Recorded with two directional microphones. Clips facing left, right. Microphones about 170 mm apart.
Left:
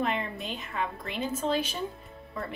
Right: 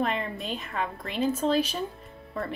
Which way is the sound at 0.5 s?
35° right (ahead or behind).